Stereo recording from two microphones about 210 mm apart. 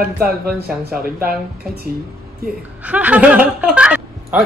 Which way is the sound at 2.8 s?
5° right (ahead or behind).